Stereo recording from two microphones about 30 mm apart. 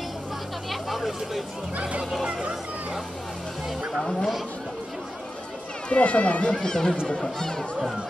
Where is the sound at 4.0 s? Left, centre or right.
Centre.